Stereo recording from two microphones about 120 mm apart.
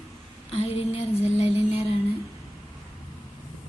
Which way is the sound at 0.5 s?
55° left (ahead or behind).